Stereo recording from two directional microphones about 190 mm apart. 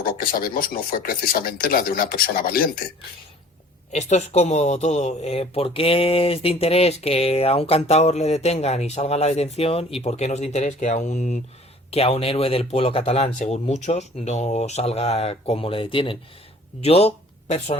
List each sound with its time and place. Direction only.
0.0 s speech: 50° left (ahead or behind)
3.9 s speech: 35° left (ahead or behind)